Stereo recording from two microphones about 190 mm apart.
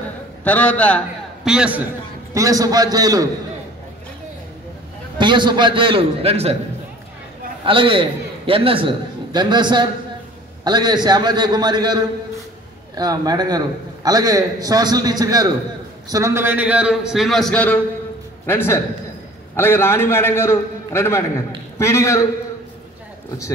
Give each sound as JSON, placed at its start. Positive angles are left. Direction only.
{"t": 0.4, "sound": "a man's voice", "side_deg": 10}
{"t": 1.4, "sound": "a man's voice", "side_deg": -5}
{"t": 2.3, "sound": "a man's voice", "side_deg": -20}
{"t": 5.2, "sound": "a man's voice", "side_deg": -25}
{"t": 7.6, "sound": "a man's voice", "side_deg": -25}